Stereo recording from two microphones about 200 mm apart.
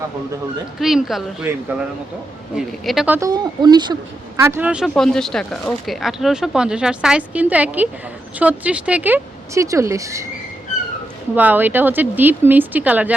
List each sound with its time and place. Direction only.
0.8 s speech: centre (ahead or behind)
2.6 s speech: centre (ahead or behind)
3.2 s speech: 20° right (ahead or behind)
11.3 s speech: 10° right (ahead or behind)